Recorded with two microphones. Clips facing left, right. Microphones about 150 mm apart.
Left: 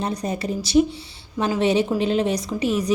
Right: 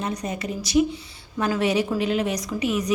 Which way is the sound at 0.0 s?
35° left (ahead or behind).